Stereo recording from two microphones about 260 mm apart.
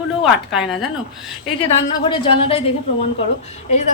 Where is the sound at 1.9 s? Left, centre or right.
Centre.